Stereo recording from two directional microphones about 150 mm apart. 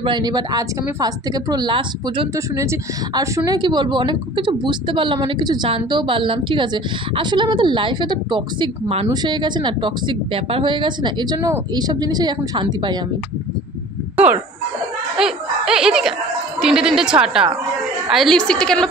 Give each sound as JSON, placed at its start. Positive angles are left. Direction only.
{"t": 0.0, "sound": "a woman's voice", "side_deg": -30}
{"t": 2.3, "sound": "a woman's voice", "side_deg": -20}
{"t": 15.1, "sound": "a woman's voice", "side_deg": -5}